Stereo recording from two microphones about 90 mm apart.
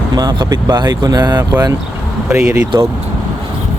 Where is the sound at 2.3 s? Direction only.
35° right (ahead or behind).